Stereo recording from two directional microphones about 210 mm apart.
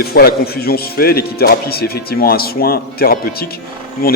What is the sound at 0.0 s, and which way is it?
Speech, 45° left (ahead or behind).